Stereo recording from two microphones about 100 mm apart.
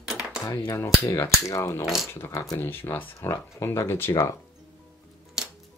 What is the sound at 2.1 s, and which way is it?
Speech, 25° left (ahead or behind).